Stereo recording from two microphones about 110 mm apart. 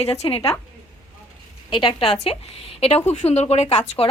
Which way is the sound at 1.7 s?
50° left (ahead or behind).